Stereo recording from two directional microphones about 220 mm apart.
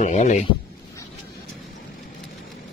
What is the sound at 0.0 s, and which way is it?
Speech, 30° left (ahead or behind).